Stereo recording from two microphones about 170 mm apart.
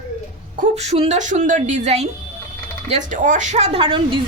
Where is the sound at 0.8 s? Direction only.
40° right (ahead or behind).